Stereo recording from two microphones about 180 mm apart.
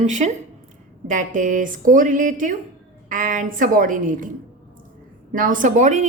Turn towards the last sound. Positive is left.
turn(degrees=-45)  # may be behind; listen again after turning